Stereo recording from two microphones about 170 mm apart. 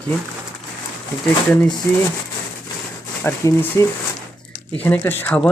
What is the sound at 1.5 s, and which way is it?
Speech, 5° left (ahead or behind).